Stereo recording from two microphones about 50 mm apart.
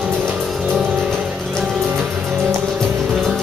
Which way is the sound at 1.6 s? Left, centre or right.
Centre.